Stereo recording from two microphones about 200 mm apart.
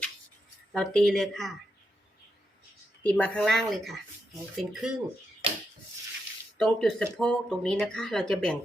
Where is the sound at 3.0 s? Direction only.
5° left (ahead or behind).